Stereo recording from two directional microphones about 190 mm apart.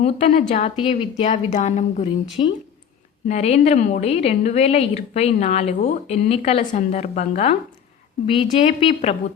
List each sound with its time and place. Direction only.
0.0 s a woman's voice: 40° left (ahead or behind)
8.4 s a woman's voice: 25° left (ahead or behind)